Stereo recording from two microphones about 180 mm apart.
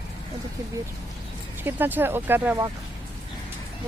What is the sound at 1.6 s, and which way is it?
Speech, 10° right (ahead or behind).